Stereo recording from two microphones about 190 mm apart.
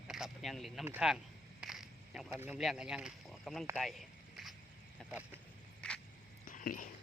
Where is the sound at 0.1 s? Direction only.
Centre (ahead or behind).